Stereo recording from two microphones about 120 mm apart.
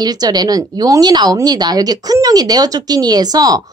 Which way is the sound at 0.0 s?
35° right (ahead or behind).